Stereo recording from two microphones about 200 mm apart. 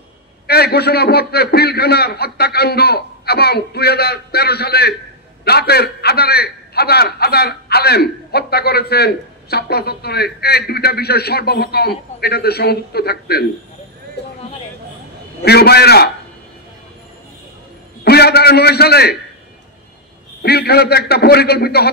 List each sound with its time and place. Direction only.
0.5 s a man's voice: 55° left (ahead or behind)
15.4 s a man's voice: 55° left (ahead or behind)
18.0 s a man's voice: 55° left (ahead or behind)
20.4 s a man's voice: 55° left (ahead or behind)